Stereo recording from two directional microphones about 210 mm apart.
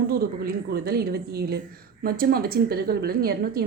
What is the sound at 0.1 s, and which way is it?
A woman's voice, 45° right (ahead or behind).